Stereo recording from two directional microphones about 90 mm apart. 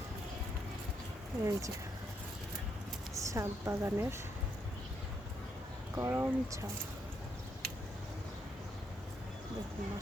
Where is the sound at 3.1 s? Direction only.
35° right (ahead or behind).